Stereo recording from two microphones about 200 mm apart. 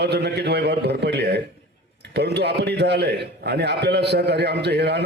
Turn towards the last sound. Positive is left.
turn(degrees=-55)  # may be behind; listen again after turning